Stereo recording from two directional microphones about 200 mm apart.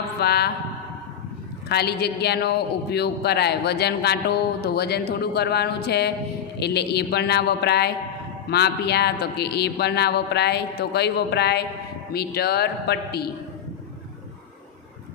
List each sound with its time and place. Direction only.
0.2 s a man's voice: 55° left (ahead or behind)
1.7 s a woman's voice: 55° left (ahead or behind)